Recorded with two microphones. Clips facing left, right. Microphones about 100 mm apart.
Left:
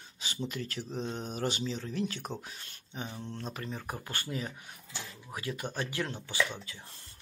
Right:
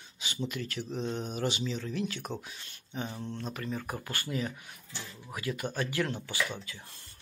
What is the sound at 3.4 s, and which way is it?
Speech, 30° left (ahead or behind).